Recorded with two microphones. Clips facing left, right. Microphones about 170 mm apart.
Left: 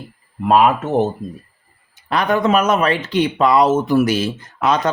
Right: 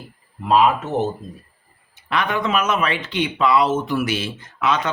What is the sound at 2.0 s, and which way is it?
Speech, 40° left (ahead or behind).